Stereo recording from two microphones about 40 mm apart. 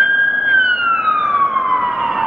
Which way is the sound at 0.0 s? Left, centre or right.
Centre.